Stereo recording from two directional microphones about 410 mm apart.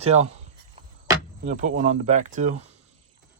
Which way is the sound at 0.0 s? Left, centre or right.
Centre.